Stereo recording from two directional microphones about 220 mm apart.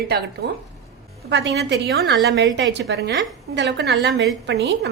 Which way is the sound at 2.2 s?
55° right (ahead or behind).